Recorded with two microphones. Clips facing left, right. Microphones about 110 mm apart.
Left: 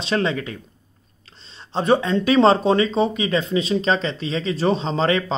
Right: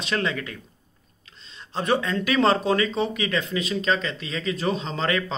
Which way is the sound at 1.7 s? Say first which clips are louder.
Left 5 dB; 25° left (ahead or behind).